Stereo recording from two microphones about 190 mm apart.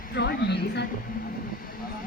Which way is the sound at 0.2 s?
60° left (ahead or behind).